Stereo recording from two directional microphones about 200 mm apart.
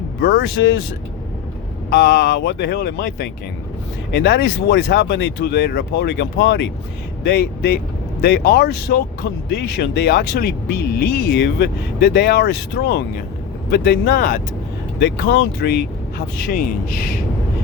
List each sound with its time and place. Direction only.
0.2 s speech: 50° left (ahead or behind); by 0.8 s 65° left (ahead or behind)
1.9 s speech: 55° left (ahead or behind)
14.9 s speech: 55° left (ahead or behind)